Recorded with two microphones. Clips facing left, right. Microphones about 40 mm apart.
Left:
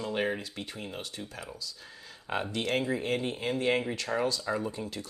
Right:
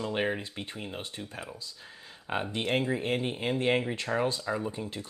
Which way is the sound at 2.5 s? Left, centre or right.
Right.